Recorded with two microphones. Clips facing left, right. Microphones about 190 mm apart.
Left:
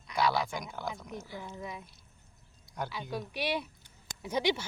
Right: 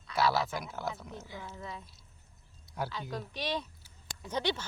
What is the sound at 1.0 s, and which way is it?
Speech, 15° left (ahead or behind).